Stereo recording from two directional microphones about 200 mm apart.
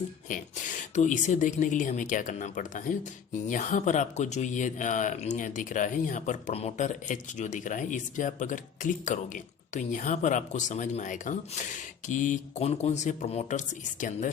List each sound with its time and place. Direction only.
0.3 s speech: 40° left (ahead or behind)